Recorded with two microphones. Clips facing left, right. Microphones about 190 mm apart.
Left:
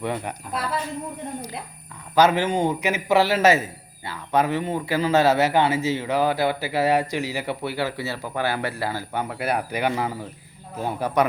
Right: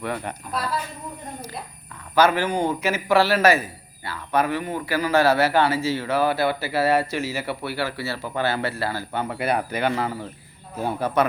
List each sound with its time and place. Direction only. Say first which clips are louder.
0.0 s a man's voice: left 1 dB; 20° left (ahead or behind)
2.1 s a man's voice: left 1 dB; 20° left (ahead or behind)